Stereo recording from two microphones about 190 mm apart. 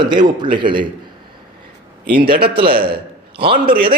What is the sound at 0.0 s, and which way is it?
Speech, 25° right (ahead or behind).